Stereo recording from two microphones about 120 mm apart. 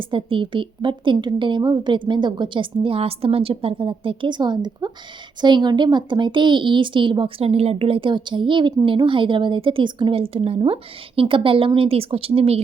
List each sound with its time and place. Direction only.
0.0 s a woman's voice: 45° right (ahead or behind)